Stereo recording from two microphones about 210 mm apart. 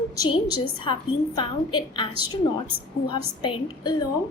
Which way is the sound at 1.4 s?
20° left (ahead or behind).